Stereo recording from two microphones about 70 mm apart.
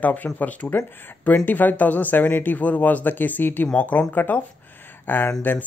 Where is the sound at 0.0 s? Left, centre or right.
Left.